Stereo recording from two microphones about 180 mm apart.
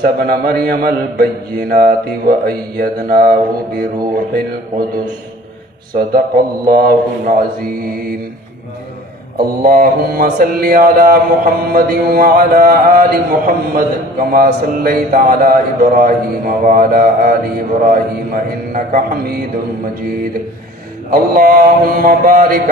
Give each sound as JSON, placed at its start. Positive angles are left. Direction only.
{"t": 0.0, "sound": "mantra", "side_deg": -55}
{"t": 5.9, "sound": "mantra", "side_deg": -55}
{"t": 9.4, "sound": "mantra", "side_deg": -55}
{"t": 21.1, "sound": "mantra", "side_deg": -55}